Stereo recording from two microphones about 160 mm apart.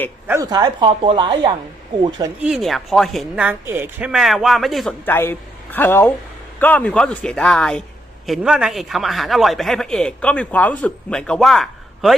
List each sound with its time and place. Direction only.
0.3 s a woman's voice: 20° right (ahead or behind)
2.4 s a man's voice: centre (ahead or behind)
5.0 s a man's voice: 15° left (ahead or behind)